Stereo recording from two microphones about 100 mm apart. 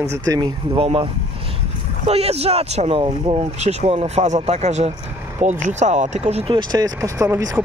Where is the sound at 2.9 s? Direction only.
65° right (ahead or behind); by 4.9 s 90° right.